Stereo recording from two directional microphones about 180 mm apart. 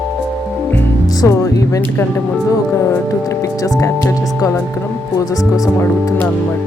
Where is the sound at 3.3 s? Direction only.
20° left (ahead or behind).